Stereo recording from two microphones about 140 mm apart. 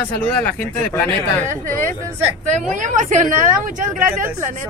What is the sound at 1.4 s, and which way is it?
A woman's voice, 65° right (ahead or behind).